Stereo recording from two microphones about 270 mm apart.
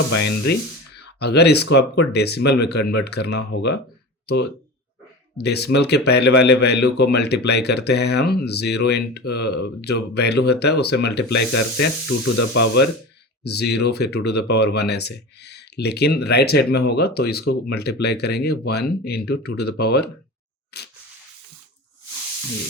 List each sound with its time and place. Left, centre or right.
0.1 s speech: left
5.4 s speech: left
12.0 s speech: left
12.5 s speech: left
20.7 s a sound: left